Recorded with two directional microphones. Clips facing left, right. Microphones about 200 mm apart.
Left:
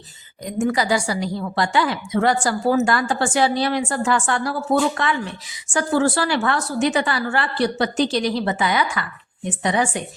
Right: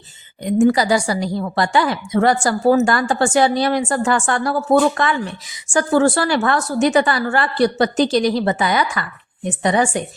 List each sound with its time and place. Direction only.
0.4 s a woman's voice: 35° right (ahead or behind)
5.6 s a woman's voice: 45° right (ahead or behind)